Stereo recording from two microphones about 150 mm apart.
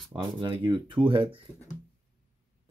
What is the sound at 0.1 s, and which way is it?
Speech, 35° right (ahead or behind).